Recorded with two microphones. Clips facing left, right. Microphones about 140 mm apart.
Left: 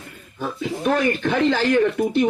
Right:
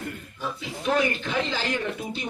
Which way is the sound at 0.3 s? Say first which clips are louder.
Left 10 dB; 50° left (ahead or behind).